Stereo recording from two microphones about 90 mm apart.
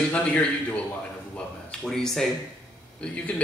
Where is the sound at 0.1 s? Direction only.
15° left (ahead or behind).